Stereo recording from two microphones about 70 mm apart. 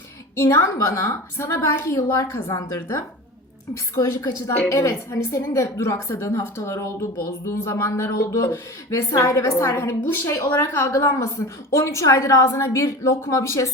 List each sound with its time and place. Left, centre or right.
0.4 s a woman's voice: left
2.5 s a woman's voice: left
10.2 s a woman's voice: left
10.5 s a woman's voice: left